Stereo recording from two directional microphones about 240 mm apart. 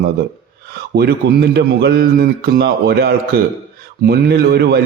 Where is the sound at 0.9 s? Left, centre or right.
Right.